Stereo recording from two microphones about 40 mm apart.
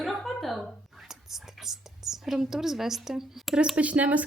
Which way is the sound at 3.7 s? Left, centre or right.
Right.